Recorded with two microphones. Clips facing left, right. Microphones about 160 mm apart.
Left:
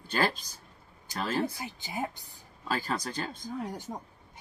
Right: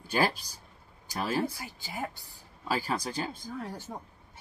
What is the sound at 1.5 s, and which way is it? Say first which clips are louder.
Speech: left 3 dB; 20° left (ahead or behind).